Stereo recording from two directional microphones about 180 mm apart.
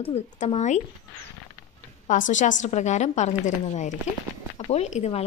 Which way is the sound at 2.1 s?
45° left (ahead or behind).